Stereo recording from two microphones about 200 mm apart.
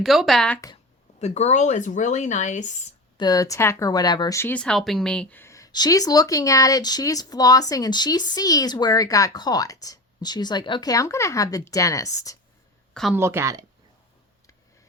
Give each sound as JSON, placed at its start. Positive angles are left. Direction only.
{"t": 0.0, "sound": "speech", "side_deg": 0}
{"t": 1.2, "sound": "speech", "side_deg": 35}
{"t": 3.2, "sound": "speech", "side_deg": 20}
{"t": 12.9, "sound": "speech", "side_deg": 0}
{"t": 13.1, "sound": "speech", "side_deg": -15}